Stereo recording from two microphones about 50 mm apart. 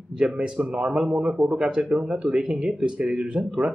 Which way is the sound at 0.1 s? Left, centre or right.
Centre.